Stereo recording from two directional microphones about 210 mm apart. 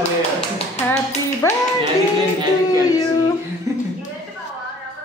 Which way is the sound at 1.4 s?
15° left (ahead or behind).